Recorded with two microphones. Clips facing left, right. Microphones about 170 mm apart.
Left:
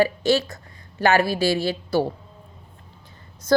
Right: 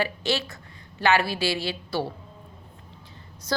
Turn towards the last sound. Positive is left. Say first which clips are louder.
# left 10 dB
turn(degrees=50)  # may be behind; listen again after turning